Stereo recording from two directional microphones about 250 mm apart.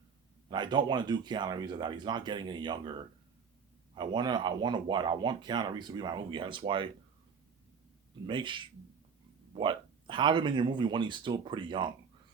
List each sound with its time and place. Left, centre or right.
0.5 s speech: centre
3.9 s speech: centre
8.3 s speech: centre